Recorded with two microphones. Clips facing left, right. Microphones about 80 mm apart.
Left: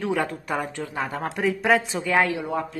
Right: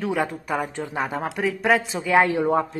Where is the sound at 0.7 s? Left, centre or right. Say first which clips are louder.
Right 2 dB; centre.